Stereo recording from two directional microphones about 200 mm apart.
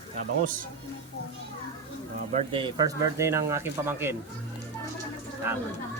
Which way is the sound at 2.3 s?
25° right (ahead or behind).